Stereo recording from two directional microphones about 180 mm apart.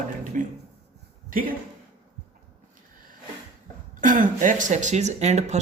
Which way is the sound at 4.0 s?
45° right (ahead or behind).